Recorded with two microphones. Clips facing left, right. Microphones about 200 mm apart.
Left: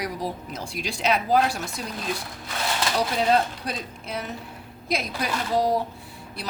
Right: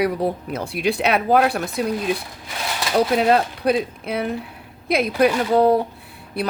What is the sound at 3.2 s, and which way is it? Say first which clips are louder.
Speech: right 4 dB; 65° right (ahead or behind).